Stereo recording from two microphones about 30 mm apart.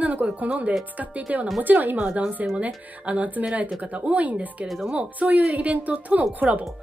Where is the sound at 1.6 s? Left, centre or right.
Right.